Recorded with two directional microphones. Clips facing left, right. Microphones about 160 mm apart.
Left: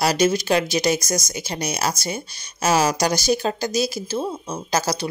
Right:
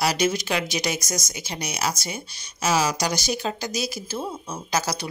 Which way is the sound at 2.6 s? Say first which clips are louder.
Left 4 dB; 45° left (ahead or behind).